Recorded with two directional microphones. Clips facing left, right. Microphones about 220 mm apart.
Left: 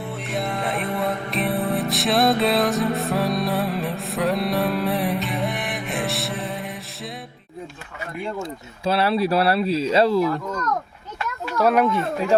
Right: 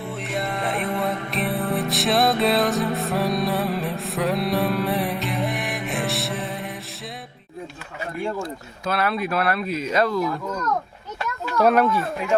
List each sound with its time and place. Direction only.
0.2 s music: centre (ahead or behind)
8.8 s speech: 30° left (ahead or behind)
11.5 s speech: 5° left (ahead or behind)
11.8 s speech: 20° left (ahead or behind)